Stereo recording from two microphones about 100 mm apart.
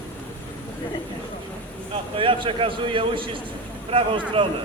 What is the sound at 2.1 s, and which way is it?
A man's voice, 60° right (ahead or behind).